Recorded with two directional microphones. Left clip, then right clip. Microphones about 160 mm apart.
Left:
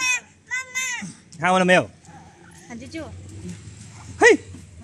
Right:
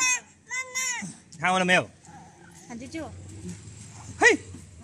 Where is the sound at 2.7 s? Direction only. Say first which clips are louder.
Left 2 dB; 90° right.